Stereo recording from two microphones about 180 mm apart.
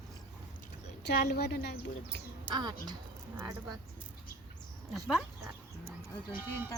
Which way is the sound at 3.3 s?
10° right (ahead or behind).